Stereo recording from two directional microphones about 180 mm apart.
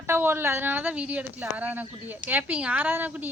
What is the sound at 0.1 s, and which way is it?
Speech, 10° right (ahead or behind).